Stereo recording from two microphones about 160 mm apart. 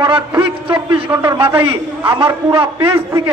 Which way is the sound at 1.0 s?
15° right (ahead or behind).